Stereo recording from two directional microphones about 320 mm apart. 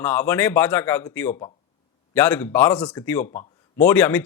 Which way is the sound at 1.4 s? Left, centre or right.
Centre.